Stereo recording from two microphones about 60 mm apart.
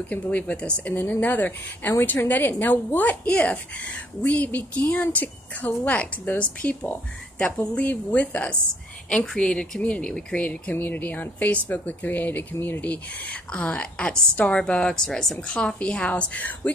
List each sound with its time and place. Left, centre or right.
0.1 s a woman's voice: left
0.9 s a woman's voice: left